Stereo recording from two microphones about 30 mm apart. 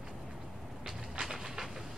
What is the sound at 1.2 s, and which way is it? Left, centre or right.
Train, centre.